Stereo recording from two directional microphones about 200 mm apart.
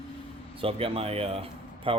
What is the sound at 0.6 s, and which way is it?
Speech, 30° right (ahead or behind).